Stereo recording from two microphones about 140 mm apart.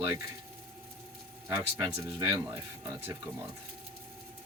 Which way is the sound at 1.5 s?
20° right (ahead or behind).